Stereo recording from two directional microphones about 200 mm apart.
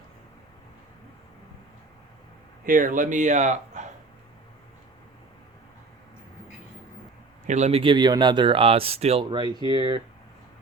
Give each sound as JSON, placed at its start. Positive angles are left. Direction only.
{"t": 2.6, "sound": "speech", "side_deg": -40}
{"t": 7.4, "sound": "speech", "side_deg": -35}